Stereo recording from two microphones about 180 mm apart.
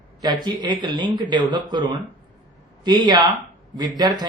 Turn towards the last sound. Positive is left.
turn(degrees=-20)  # may be behind; listen again after turning